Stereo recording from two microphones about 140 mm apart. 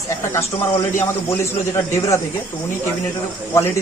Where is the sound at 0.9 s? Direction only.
20° left (ahead or behind).